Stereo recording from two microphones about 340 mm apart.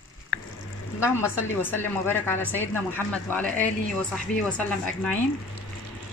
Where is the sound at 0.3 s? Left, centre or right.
Left.